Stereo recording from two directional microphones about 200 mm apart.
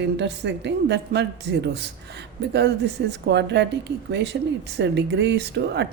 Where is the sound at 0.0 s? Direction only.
60° right (ahead or behind).